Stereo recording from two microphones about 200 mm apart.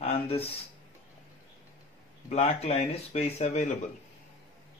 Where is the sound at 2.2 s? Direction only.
35° left (ahead or behind).